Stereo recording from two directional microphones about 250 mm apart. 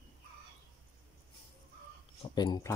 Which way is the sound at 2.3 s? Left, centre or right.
Centre.